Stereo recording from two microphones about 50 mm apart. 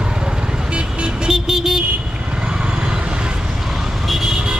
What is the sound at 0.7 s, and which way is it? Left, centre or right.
Vehicle, centre.